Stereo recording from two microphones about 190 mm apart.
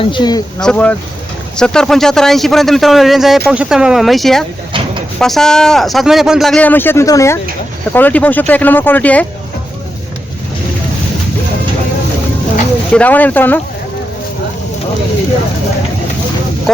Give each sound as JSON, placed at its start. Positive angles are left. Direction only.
{"t": 0.0, "sound": "speech", "side_deg": 25}
{"t": 0.6, "sound": "speech", "side_deg": 5}
{"t": 12.9, "sound": "speech", "side_deg": 10}
{"t": 16.7, "sound": "speech", "side_deg": 0}